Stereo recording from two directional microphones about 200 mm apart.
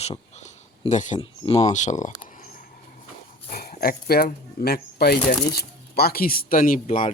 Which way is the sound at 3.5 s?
50° left (ahead or behind).